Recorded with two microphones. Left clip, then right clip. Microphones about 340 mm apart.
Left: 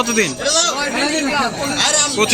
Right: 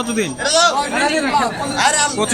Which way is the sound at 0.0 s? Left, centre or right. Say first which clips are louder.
Left 4 dB; centre.